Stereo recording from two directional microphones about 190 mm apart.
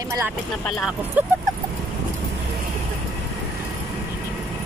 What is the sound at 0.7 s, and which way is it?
Speech, centre (ahead or behind).